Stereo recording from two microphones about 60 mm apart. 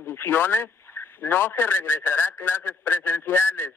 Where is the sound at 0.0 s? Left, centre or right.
Left.